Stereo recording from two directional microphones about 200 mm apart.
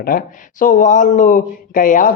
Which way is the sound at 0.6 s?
40° left (ahead or behind).